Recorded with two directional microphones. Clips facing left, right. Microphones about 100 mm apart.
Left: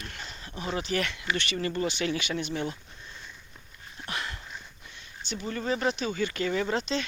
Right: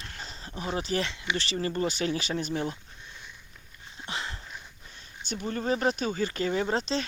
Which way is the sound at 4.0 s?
25° right (ahead or behind).